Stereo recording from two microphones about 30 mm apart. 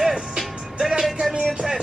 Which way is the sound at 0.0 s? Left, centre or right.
Centre.